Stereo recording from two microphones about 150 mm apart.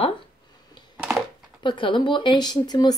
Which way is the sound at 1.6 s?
30° left (ahead or behind).